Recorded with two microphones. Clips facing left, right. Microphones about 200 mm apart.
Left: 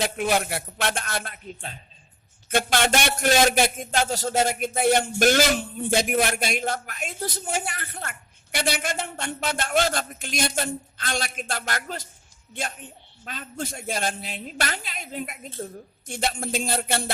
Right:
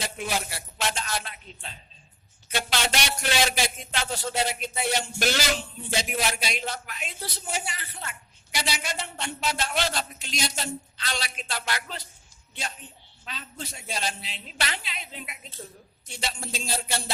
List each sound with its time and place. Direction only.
0.0 s a man's voice: 60° left (ahead or behind)